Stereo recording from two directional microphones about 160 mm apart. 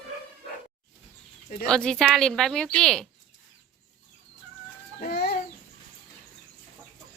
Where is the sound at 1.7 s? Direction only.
5° left (ahead or behind).